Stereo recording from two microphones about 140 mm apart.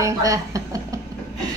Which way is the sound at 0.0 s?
25° right (ahead or behind).